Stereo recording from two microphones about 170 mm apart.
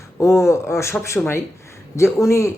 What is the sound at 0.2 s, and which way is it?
Speech, 15° left (ahead or behind).